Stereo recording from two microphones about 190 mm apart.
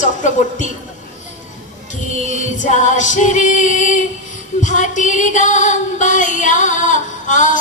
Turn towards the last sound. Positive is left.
turn(degrees=40)  # may be behind; listen again after turning